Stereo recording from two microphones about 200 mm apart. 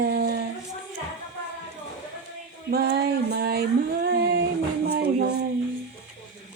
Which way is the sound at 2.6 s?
50° right (ahead or behind).